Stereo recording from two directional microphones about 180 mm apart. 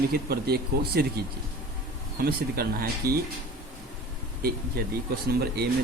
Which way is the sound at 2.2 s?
60° right (ahead or behind).